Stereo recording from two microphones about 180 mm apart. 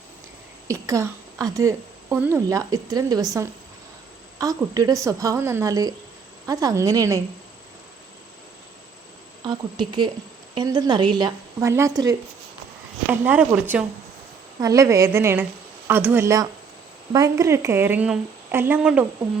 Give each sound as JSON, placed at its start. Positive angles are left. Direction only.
{"t": 0.7, "sound": "a woman's voice", "side_deg": -15}
{"t": 9.4, "sound": "a woman's voice", "side_deg": -25}